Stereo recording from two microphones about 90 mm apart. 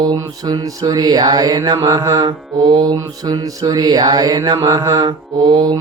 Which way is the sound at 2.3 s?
55° right (ahead or behind).